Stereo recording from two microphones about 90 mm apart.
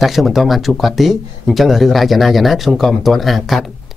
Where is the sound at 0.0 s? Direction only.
Centre (ahead or behind).